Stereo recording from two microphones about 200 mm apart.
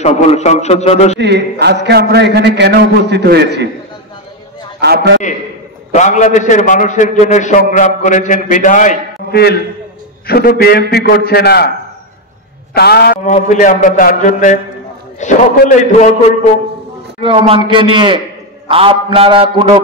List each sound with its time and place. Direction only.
0.0 s a man's voice: 30° left (ahead or behind)
1.2 s a man's voice: 55° right (ahead or behind)
4.7 s a man's voice: 55° right (ahead or behind)
5.9 s a man's voice: 40° left (ahead or behind)
12.7 s a man's voice: 55° left (ahead or behind)
13.2 s a man's voice: 40° left (ahead or behind)
17.2 s a man's voice: 25° right (ahead or behind)